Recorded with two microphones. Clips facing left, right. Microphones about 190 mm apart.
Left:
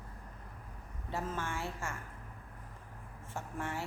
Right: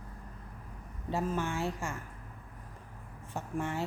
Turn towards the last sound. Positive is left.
turn(degrees=-20)  # may be behind; listen again after turning